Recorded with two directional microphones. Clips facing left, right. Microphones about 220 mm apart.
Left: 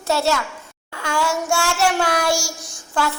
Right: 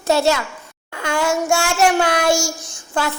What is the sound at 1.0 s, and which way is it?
Child singing, 20° right (ahead or behind).